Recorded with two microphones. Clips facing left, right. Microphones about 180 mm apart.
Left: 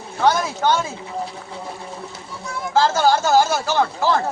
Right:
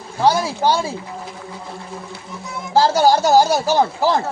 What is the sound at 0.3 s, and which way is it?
Speech, 35° right (ahead or behind).